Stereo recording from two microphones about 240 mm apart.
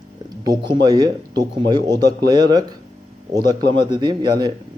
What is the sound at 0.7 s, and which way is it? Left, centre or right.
Speech, centre.